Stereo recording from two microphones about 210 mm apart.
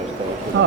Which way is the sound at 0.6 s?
60° right (ahead or behind).